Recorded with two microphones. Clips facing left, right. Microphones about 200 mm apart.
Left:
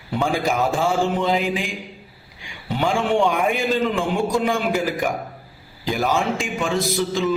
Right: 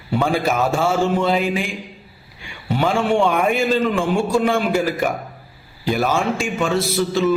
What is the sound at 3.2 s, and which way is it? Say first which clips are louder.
A man's voice: right 2 dB; 15° left (ahead or behind).